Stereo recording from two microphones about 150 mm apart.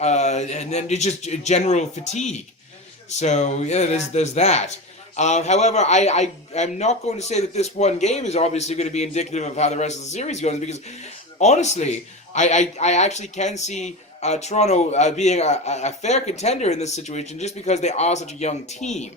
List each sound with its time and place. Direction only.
0.0 s speech: 50° left (ahead or behind)